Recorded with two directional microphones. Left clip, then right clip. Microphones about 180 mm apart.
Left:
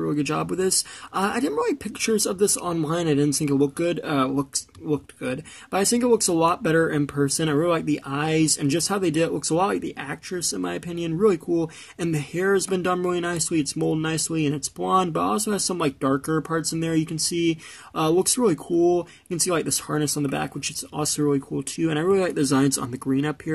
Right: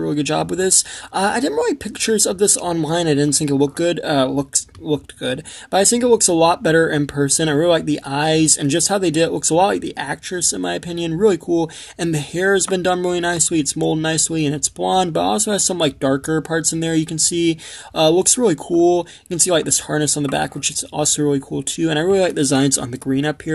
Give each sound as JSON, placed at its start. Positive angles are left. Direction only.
{"t": 0.0, "sound": "speech", "side_deg": 40}